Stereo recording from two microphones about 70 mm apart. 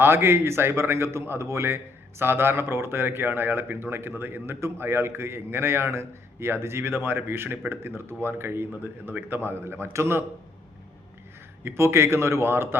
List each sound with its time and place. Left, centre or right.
0.0 s a man's voice: right
11.6 s a man's voice: right